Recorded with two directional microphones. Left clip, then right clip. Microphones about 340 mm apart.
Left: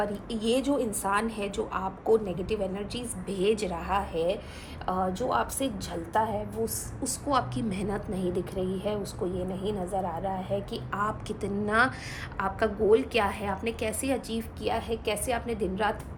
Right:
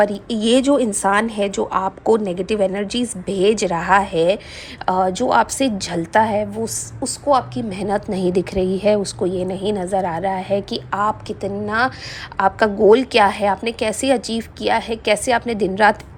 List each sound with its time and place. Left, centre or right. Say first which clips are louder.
0.0 s a woman's voice: right 13 dB; centre